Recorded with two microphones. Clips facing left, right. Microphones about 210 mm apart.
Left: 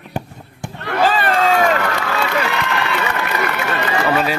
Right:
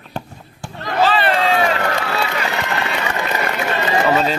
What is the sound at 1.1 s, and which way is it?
Run, 45° left (ahead or behind).